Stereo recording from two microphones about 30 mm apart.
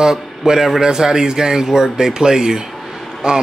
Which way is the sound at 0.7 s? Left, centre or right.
Right.